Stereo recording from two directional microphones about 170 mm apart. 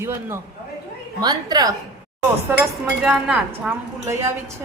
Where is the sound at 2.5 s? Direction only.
5° right (ahead or behind).